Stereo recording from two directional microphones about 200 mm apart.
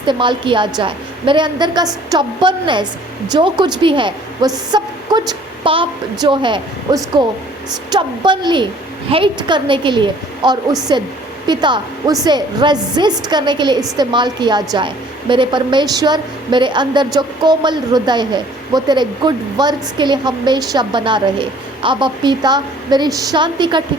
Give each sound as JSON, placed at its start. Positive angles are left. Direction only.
{"t": 0.0, "sound": "a woman's voice", "side_deg": -25}